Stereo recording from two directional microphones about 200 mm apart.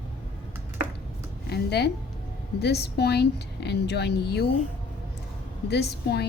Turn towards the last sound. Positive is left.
turn(degrees=55)  # may be behind; listen again after turning